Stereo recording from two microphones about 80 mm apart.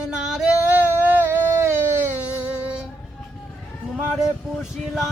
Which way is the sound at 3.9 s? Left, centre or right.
Centre.